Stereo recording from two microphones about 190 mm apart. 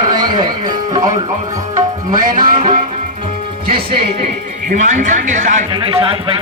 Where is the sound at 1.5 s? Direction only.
20° right (ahead or behind).